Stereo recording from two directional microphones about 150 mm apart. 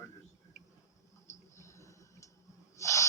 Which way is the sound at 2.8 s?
20° left (ahead or behind).